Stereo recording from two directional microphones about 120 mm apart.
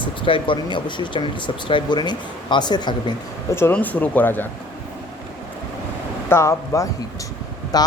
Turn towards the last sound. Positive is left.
turn(degrees=35)  # may be behind; listen again after turning